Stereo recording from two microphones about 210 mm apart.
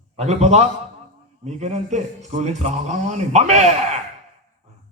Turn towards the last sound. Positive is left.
turn(degrees=-35)  # may be behind; listen again after turning